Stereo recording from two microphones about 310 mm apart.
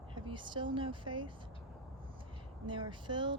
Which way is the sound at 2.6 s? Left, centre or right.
Centre.